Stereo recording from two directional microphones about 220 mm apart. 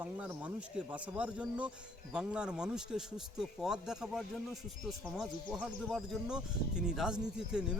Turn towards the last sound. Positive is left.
turn(degrees=-5)  # may be behind; listen again after turning